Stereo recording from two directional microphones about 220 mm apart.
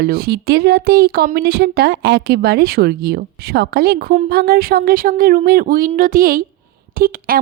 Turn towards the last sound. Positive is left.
turn(degrees=-40)  # may be behind; listen again after turning